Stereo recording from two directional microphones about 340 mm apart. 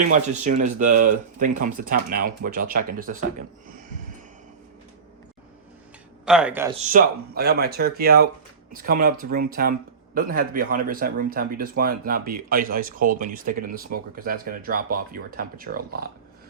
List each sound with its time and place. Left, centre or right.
0.6 s speech: right
6.2 s speech: centre
6.7 s speech: right